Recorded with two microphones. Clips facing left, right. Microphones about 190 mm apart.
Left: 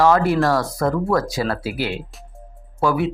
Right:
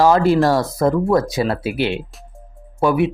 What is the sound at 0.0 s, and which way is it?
Speech, 30° right (ahead or behind).